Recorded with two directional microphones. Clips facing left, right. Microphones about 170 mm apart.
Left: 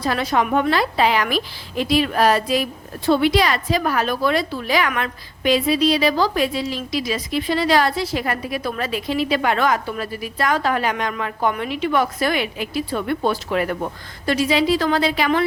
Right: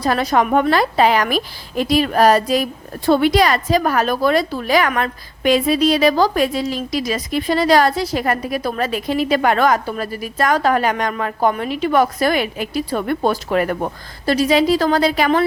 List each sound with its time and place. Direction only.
0.0 s a woman's voice: 40° right (ahead or behind)